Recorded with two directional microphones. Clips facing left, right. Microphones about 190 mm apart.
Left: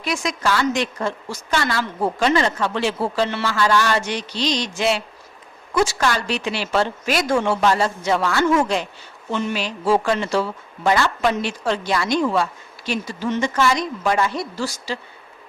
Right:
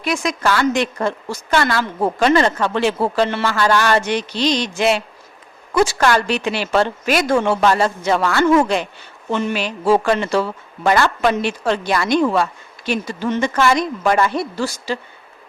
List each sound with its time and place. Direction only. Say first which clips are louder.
0.0 s a woman's voice: right 3 dB; 55° right (ahead or behind)